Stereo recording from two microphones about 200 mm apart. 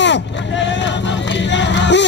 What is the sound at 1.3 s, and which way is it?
Music, 60° left (ahead or behind).